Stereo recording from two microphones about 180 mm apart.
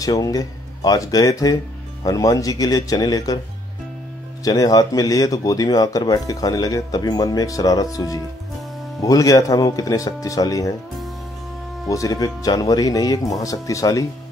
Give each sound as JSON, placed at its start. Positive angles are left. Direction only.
{"t": 0.0, "sound": "speech", "side_deg": 20}
{"t": 4.5, "sound": "speech", "side_deg": 20}
{"t": 11.9, "sound": "speech", "side_deg": 20}